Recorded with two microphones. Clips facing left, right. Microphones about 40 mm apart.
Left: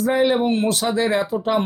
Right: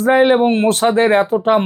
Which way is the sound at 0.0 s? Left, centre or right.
Right.